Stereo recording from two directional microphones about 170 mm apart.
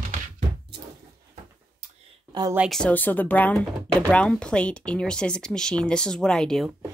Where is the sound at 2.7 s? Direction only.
5° left (ahead or behind).